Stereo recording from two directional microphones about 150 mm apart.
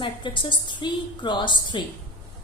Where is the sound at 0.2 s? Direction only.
30° left (ahead or behind).